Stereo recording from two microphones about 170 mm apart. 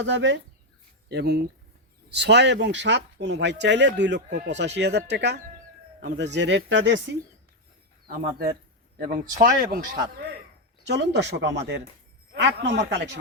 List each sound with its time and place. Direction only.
0.0 s speech: 90° right
1.0 s speech: 80° right
2.0 s speech: 90° right
6.0 s speech: 70° right (ahead or behind)
6.3 s speech: 90° right
8.0 s speech: 60° right (ahead or behind)
10.9 s speech: 85° right